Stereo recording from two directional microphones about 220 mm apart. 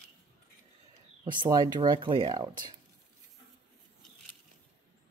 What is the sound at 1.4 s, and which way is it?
Speech, 20° right (ahead or behind).